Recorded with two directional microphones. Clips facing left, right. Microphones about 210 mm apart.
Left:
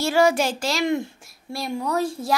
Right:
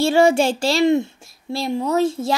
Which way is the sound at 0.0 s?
25° right (ahead or behind).